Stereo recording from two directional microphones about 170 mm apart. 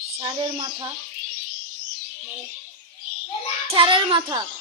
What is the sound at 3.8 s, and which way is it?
Speech, 30° right (ahead or behind).